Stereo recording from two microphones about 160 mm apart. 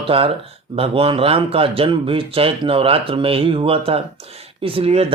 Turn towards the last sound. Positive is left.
turn(degrees=-40)  # may be behind; listen again after turning